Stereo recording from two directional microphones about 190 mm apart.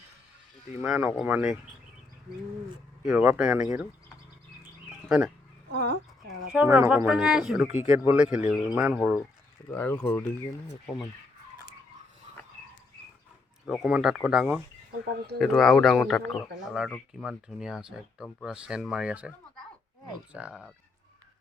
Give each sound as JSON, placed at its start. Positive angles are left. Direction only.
{"t": 0.8, "sound": "speech", "side_deg": -10}
{"t": 3.0, "sound": "speech", "side_deg": -5}
{"t": 4.9, "sound": "a sound", "side_deg": -5}
{"t": 5.7, "sound": "speech", "side_deg": -65}
{"t": 6.5, "sound": "speech", "side_deg": -10}
{"t": 9.6, "sound": "speech", "side_deg": 10}
{"t": 13.8, "sound": "speech", "side_deg": -5}
{"t": 20.3, "sound": "speech", "side_deg": -5}